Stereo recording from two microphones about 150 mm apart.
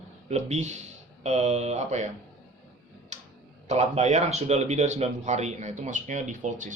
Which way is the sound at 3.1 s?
50° right (ahead or behind).